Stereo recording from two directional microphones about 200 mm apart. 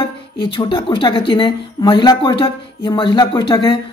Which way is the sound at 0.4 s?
25° left (ahead or behind).